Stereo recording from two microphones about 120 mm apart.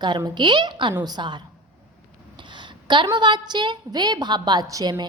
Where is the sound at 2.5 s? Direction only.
40° right (ahead or behind).